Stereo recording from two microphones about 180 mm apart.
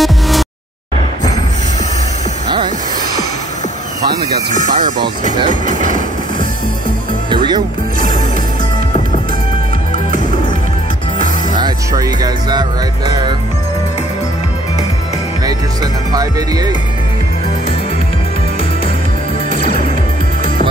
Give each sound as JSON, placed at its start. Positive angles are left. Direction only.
{"t": 0.0, "sound": "a sound", "side_deg": 0}
{"t": 4.6, "sound": "speech", "side_deg": -45}
{"t": 11.5, "sound": "music", "side_deg": -20}
{"t": 15.4, "sound": "music", "side_deg": -20}
{"t": 19.5, "sound": "music", "side_deg": -45}